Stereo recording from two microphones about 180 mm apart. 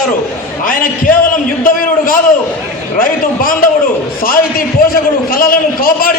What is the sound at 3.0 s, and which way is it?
A man's voice, 55° left (ahead or behind).